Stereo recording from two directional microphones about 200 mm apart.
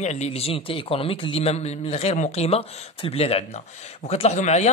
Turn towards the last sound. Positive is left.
turn(degrees=35)  # may be behind; listen again after turning